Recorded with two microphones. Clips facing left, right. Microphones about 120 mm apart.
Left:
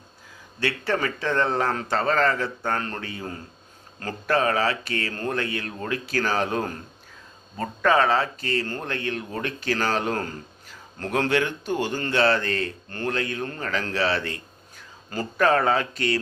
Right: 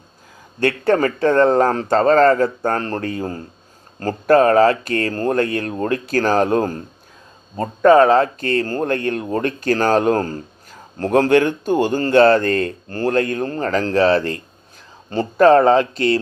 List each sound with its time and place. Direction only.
0.6 s speech: 45° right (ahead or behind)